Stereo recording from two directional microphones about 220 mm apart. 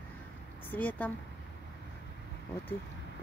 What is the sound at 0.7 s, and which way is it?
Speech, 10° left (ahead or behind).